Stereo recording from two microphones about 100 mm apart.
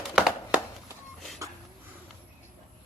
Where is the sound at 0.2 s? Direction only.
5° right (ahead or behind).